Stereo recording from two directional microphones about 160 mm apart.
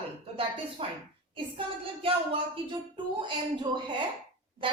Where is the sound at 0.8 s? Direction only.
35° right (ahead or behind).